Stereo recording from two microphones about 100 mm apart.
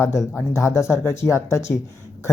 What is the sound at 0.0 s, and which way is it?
Speech, 30° left (ahead or behind).